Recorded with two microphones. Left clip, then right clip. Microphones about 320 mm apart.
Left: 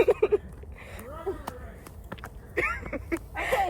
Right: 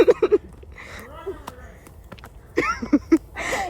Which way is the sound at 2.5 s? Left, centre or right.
Right.